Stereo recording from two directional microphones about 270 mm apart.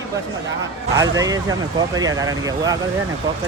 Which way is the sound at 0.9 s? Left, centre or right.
Centre.